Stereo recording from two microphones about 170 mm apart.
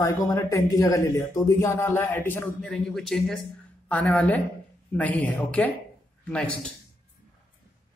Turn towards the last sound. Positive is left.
turn(degrees=5)  # may be behind; listen again after turning